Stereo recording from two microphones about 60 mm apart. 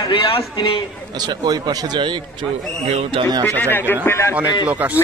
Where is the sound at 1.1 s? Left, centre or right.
Right.